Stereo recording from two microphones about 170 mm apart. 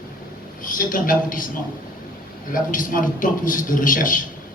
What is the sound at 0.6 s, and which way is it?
Speech, 50° left (ahead or behind).